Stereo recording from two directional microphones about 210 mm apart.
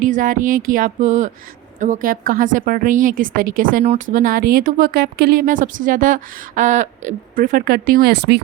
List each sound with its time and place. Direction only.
0.0 s a woman's voice: 40° right (ahead or behind)